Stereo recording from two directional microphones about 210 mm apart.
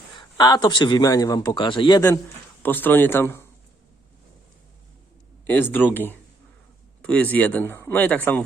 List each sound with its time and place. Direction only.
0.1 s a man's voice: 20° left (ahead or behind)
2.6 s speech: 10° left (ahead or behind)
5.5 s speech: 10° left (ahead or behind)